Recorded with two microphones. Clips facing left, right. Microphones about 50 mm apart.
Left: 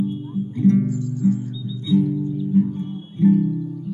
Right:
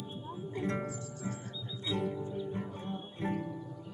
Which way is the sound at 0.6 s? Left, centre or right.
Right.